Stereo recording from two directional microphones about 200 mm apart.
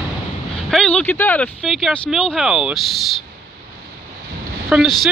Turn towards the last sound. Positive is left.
turn(degrees=0)  # may be behind; listen again after turning